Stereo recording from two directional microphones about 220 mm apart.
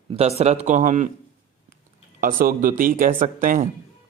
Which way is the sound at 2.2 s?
40° right (ahead or behind).